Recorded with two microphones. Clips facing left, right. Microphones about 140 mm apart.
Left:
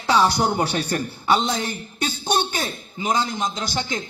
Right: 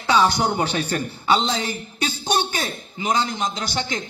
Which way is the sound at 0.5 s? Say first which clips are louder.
Even; 5° left (ahead or behind).